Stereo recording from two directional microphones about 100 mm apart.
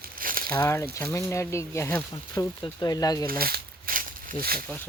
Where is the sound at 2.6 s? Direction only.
45° left (ahead or behind).